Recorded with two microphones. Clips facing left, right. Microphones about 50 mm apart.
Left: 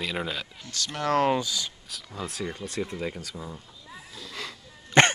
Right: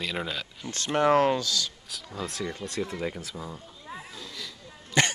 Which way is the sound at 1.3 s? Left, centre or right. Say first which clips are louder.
Left 1 dB; centre.